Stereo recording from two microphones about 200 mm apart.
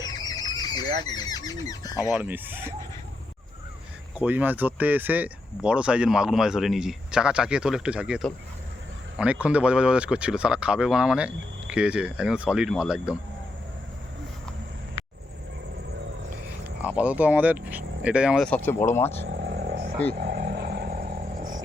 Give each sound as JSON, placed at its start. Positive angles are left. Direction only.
{"t": 0.0, "sound": "a sound", "side_deg": 20}
{"t": 1.1, "sound": "speech", "side_deg": 20}
{"t": 2.1, "sound": "speech", "side_deg": -10}
{"t": 4.2, "sound": "speech", "side_deg": -10}
{"t": 16.8, "sound": "speech", "side_deg": -5}
{"t": 19.3, "sound": "vehicle", "side_deg": -60}
{"t": 20.1, "sound": "a sound", "side_deg": -55}